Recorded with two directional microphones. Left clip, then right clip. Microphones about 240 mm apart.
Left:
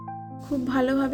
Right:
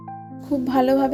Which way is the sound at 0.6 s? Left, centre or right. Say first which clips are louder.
Right 6 dB; centre.